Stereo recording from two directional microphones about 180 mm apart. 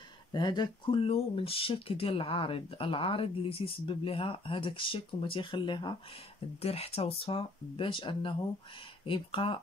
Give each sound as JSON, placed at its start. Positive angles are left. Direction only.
{"t": 0.3, "sound": "speech", "side_deg": 25}